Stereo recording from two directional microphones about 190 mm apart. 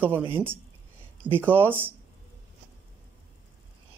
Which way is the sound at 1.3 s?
10° right (ahead or behind).